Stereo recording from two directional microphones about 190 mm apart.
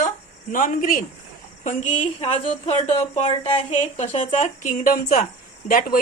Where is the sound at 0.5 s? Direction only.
45° left (ahead or behind).